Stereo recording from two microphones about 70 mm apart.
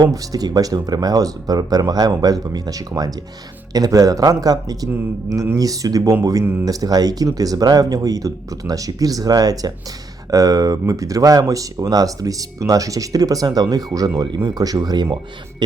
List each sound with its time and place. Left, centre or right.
0.0 s speech: right
6.4 s speech: right
6.7 s speech: right
14.2 s speech: right